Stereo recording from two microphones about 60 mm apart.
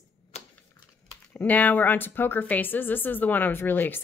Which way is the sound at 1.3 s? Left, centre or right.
Left.